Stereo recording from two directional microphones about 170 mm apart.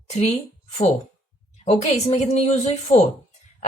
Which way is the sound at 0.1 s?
40° left (ahead or behind).